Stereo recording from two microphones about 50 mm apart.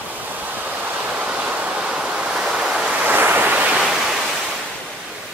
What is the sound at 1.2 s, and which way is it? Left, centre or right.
Waves, right.